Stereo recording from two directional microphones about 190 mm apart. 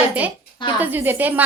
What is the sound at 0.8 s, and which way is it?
Speech, 10° right (ahead or behind).